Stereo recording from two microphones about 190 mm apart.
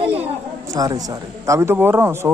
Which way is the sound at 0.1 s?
10° right (ahead or behind).